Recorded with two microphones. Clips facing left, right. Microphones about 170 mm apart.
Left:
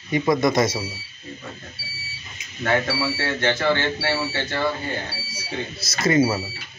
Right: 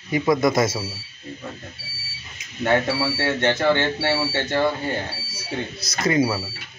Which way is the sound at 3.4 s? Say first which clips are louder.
Right 2 dB; 20° right (ahead or behind).